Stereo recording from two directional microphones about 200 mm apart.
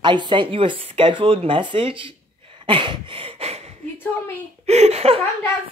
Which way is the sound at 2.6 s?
25° right (ahead or behind).